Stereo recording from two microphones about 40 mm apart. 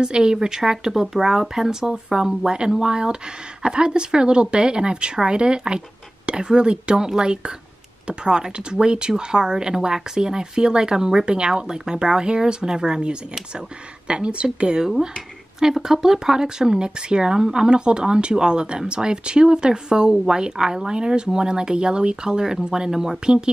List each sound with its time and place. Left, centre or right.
0.0 s speech: centre
14.8 s speech: centre